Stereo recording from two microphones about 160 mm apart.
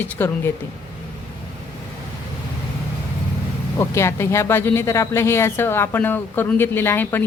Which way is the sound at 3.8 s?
15° left (ahead or behind).